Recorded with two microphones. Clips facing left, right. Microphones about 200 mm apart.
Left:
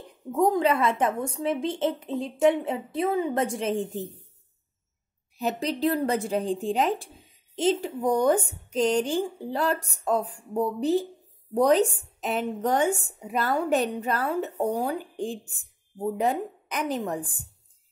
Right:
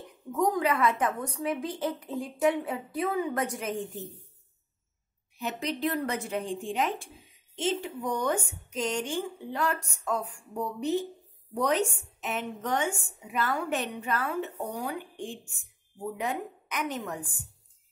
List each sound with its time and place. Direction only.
0.3 s a woman's voice: 30° left (ahead or behind)
5.4 s a woman's voice: 35° left (ahead or behind)